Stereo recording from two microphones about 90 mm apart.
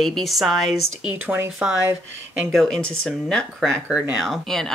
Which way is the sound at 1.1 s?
25° right (ahead or behind).